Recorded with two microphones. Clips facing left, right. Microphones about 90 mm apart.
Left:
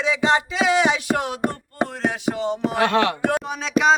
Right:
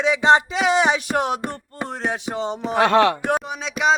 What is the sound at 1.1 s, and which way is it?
Music, 25° right (ahead or behind).